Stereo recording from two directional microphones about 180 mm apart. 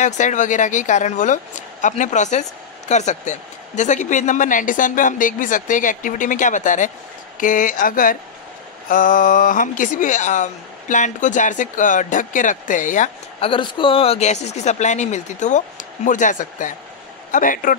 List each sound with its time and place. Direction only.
0.0 s speech: 45° left (ahead or behind)
13.4 s speech: 30° left (ahead or behind); by 17.7 s 50° left (ahead or behind)